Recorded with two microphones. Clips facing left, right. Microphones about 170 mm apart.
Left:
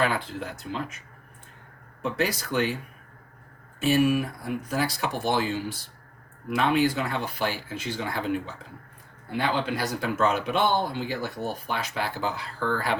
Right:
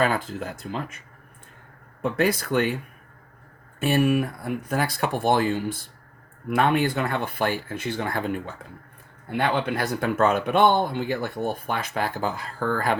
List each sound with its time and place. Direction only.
0.0 s speech: 45° right (ahead or behind)
2.0 s speech: 55° right (ahead or behind)
3.8 s speech: 55° right (ahead or behind)
9.4 s speech: 55° right (ahead or behind)